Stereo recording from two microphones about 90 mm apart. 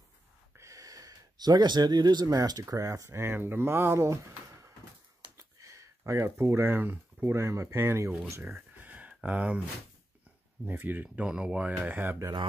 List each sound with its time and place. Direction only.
0.6 s speech: 40° right (ahead or behind)
5.4 s a sound: 35° right (ahead or behind)
7.3 s speech: 30° right (ahead or behind)
8.5 s a sound: 15° right (ahead or behind)
10.6 s speech: 20° right (ahead or behind)
12.0 s speech: 25° right (ahead or behind)